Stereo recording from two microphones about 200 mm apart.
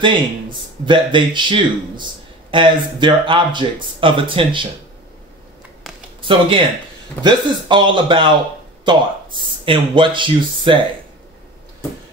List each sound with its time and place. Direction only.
0.0 s speech: 25° right (ahead or behind)
5.9 s a sound: centre (ahead or behind)
7.2 s speech: 25° right (ahead or behind)